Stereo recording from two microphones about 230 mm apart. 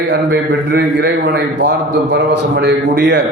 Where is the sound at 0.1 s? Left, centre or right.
Right.